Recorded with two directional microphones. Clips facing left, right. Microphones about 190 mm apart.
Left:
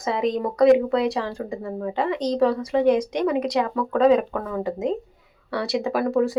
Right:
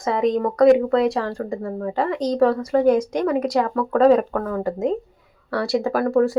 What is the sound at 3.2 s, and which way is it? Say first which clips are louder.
Speech: right 2 dB; 20° left (ahead or behind).